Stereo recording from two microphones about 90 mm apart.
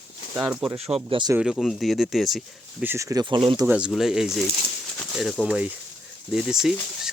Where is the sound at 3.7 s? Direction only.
10° right (ahead or behind).